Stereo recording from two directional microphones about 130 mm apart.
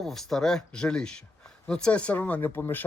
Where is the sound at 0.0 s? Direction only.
Centre (ahead or behind).